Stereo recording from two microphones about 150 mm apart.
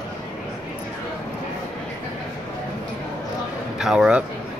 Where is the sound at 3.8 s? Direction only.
5° right (ahead or behind).